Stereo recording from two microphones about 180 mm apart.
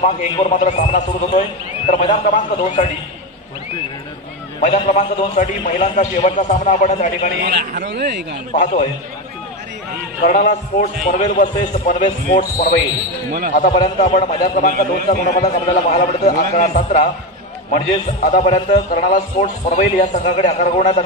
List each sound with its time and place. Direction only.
0.0 s a man's voice: 40° left (ahead or behind)
4.6 s a man's voice: 40° left (ahead or behind)
7.4 s a man's voice: 60° right (ahead or behind)
10.2 s a man's voice: 50° left (ahead or behind)